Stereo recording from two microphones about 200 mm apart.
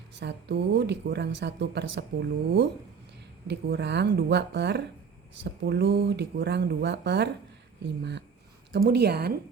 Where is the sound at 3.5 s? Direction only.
60° right (ahead or behind).